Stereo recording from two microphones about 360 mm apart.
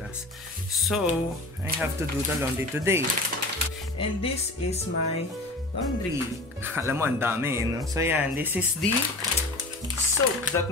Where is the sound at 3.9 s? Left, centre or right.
Centre.